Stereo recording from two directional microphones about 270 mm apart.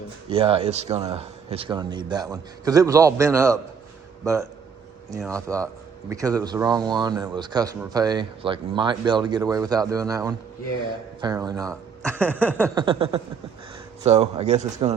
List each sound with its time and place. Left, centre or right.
0.3 s speech: right
5.3 s speech: centre
12.7 s speech: centre